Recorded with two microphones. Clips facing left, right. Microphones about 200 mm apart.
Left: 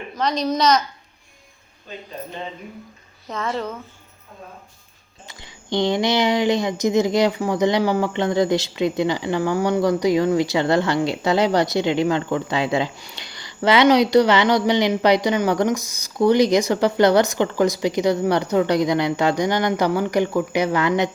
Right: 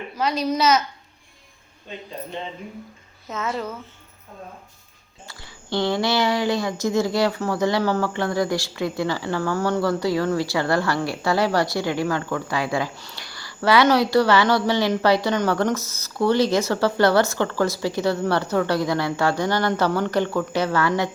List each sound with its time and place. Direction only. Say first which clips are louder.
0.2 s a woman's voice: left 1 dB; 5° right (ahead or behind)
3.2 s speech: left 2 dB; 5° right (ahead or behind)
5.3 s speech: left 2 dB; 20° left (ahead or behind)